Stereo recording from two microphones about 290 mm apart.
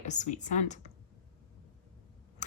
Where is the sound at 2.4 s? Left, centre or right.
Left.